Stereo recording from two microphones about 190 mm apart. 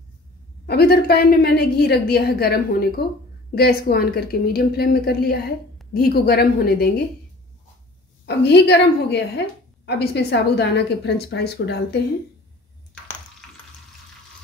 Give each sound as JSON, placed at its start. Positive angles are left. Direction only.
{"t": 0.7, "sound": "a woman's voice", "side_deg": 55}
{"t": 8.3, "sound": "a woman's voice", "side_deg": 60}